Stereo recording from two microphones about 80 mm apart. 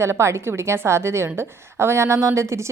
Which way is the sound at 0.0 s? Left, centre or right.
Right.